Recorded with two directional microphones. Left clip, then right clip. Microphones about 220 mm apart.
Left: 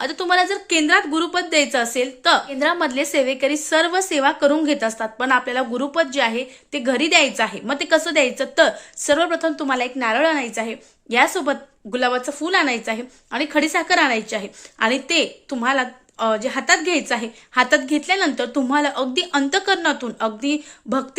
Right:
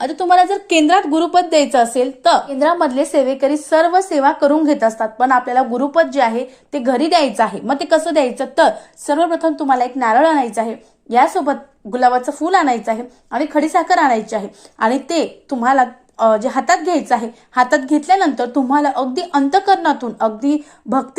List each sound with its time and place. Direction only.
0.0 s a woman's voice: centre (ahead or behind)
2.6 s a woman's voice: 20° left (ahead or behind)
9.0 s a woman's voice: 35° left (ahead or behind)